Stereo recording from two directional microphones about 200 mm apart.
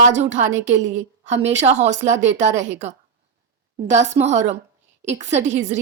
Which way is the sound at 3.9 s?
35° right (ahead or behind).